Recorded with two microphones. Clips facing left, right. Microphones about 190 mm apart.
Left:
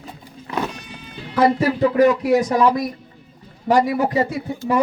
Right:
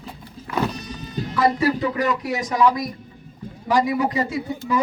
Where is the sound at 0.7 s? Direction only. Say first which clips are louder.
Right 4 dB; 40° right (ahead or behind).